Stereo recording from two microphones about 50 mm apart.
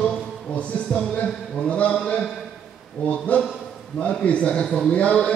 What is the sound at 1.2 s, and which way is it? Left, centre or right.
Speech, left.